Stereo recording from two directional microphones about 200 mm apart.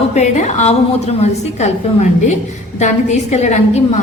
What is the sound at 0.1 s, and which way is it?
A woman's voice, 35° left (ahead or behind).